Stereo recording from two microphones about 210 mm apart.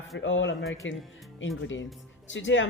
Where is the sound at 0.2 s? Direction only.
60° left (ahead or behind).